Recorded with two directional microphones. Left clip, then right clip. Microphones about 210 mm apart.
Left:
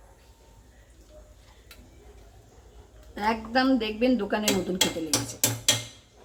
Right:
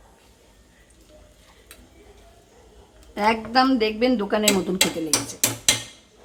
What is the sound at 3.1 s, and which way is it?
Speech, 35° right (ahead or behind).